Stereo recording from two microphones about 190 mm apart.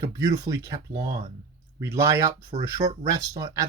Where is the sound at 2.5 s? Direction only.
35° right (ahead or behind).